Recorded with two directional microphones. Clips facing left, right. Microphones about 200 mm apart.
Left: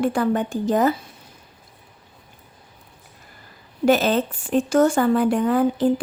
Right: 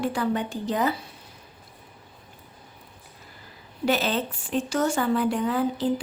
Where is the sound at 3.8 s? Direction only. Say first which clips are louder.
Left 7 dB; 50° left (ahead or behind).